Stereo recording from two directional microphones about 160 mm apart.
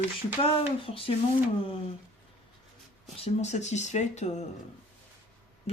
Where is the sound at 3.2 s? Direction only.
45° left (ahead or behind).